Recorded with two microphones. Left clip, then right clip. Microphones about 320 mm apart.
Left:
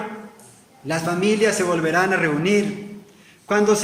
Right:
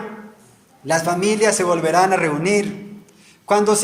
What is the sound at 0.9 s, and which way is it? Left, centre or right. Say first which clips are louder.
A man's voice: right 3 dB; centre.